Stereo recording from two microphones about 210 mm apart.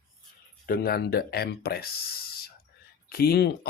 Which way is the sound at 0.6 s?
45° left (ahead or behind).